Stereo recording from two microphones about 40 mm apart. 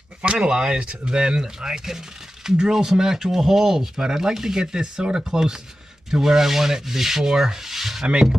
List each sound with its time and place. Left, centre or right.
0.2 s speech: right
2.7 s rub: centre